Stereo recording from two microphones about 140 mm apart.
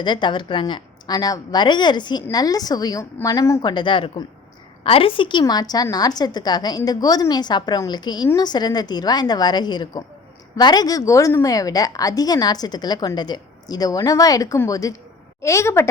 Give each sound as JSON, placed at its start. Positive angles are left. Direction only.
{"t": 0.0, "sound": "a woman's voice", "side_deg": 35}